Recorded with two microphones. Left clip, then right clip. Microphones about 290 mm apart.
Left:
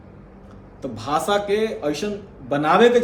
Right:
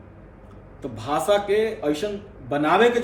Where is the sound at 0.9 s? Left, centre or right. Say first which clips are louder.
Even; centre.